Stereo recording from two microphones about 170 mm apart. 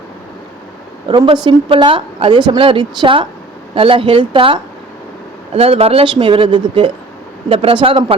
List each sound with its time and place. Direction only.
1.0 s a woman's voice: 30° right (ahead or behind)